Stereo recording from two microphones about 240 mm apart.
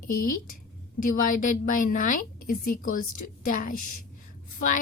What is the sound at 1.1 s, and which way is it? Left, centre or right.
A woman's voice, left.